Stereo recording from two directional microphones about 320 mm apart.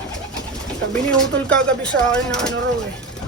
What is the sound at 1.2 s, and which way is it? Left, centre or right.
Speech, centre.